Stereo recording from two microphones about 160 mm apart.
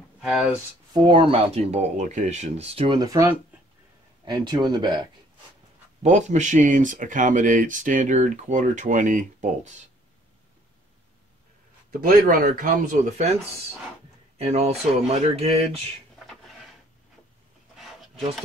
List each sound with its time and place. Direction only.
0.2 s speech: centre (ahead or behind)
1.0 s speech: 30° right (ahead or behind)
6.0 s speech: 50° right (ahead or behind)
11.9 s speech: 65° right (ahead or behind)
13.2 s speech: 40° right (ahead or behind)